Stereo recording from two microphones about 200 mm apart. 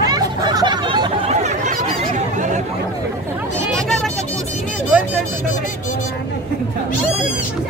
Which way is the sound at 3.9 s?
Centre (ahead or behind).